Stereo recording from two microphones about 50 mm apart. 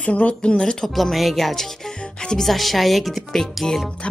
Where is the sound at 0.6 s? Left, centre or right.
Centre.